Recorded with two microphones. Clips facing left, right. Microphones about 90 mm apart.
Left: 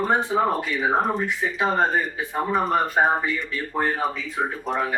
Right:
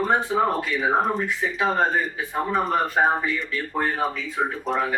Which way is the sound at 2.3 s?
Centre (ahead or behind).